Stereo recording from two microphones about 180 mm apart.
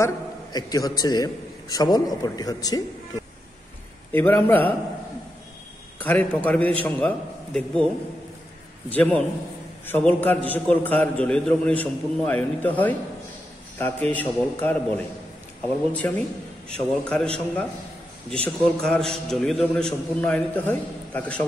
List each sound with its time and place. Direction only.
0.0 s a man's voice: 20° left (ahead or behind)
4.1 s a man's voice: 10° left (ahead or behind)
5.9 s a man's voice: 10° left (ahead or behind)
8.9 s a man's voice: 5° left (ahead or behind)
18.3 s a man's voice: 5° left (ahead or behind)